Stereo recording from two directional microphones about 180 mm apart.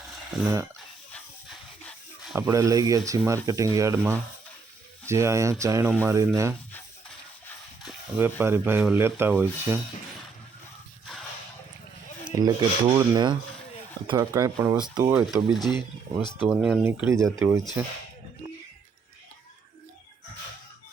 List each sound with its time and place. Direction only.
0.4 s speech: 15° right (ahead or behind)
1.1 s dog: 5° left (ahead or behind)
2.5 s filing: 20° right (ahead or behind)
3.1 s speech: 15° right (ahead or behind)
8.2 s speech: 10° right (ahead or behind)
11.0 s whip: centre (ahead or behind)
12.3 s filing: 20° right (ahead or behind)
14.2 s speech: 15° right (ahead or behind)
14.9 s filing: 20° right (ahead or behind)
15.3 s speech: centre (ahead or behind)
16.8 s speech: 15° right (ahead or behind)